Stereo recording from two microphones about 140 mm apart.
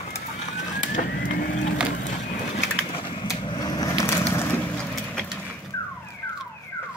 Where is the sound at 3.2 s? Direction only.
30° left (ahead or behind).